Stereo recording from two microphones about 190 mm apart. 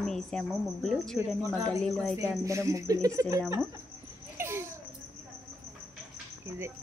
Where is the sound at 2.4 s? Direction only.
15° right (ahead or behind).